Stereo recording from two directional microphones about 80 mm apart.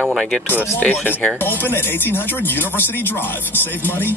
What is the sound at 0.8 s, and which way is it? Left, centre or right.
Speech, left.